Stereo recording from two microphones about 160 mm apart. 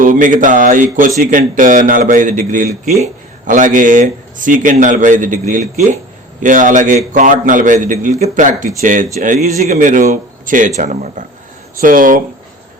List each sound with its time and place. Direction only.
0.0 s speech: 55° right (ahead or behind)